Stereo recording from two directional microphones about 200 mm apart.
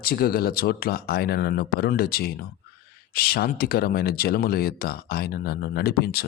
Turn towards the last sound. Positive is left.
turn(degrees=50)  # may be behind; listen again after turning